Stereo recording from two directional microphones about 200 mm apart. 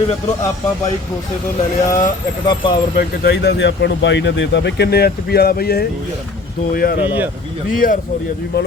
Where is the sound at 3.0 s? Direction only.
55° left (ahead or behind).